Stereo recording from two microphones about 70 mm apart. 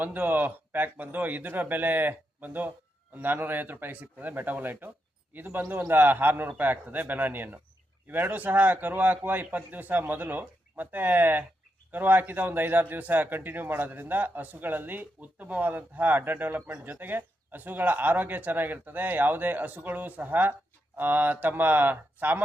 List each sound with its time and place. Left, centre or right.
0.0 s speech: right